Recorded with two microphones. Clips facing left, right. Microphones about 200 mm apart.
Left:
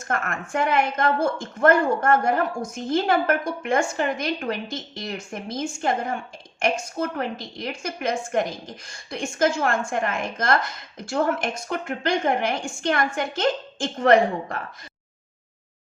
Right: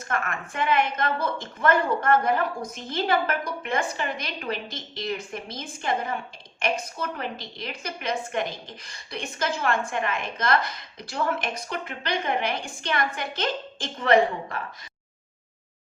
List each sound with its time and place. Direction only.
0.1 s a woman's voice: 45° left (ahead or behind)